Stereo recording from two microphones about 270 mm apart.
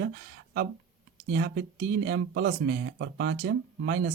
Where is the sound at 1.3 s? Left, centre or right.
Right.